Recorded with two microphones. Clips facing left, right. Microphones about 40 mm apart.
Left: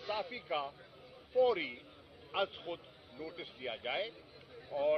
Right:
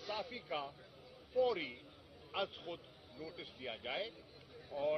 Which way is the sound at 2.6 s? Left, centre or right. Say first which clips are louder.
Left 4 dB; left.